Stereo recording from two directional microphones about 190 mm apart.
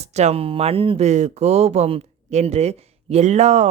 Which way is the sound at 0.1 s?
35° right (ahead or behind).